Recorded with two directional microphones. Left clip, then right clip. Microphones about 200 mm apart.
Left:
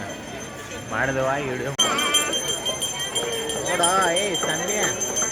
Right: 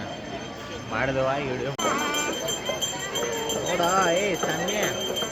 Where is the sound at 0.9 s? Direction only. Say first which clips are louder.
Left 2 dB; 10° left (ahead or behind).